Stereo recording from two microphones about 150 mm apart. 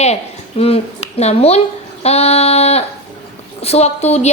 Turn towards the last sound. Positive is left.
turn(degrees=45)  # may be behind; listen again after turning